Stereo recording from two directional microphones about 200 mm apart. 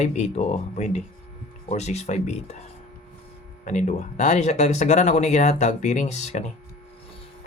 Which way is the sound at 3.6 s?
35° left (ahead or behind).